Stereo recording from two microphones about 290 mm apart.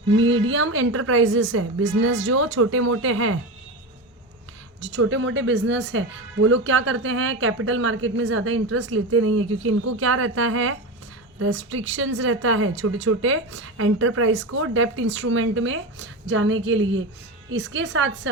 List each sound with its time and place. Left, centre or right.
0.2 s a woman's voice: right
4.8 s a woman's voice: right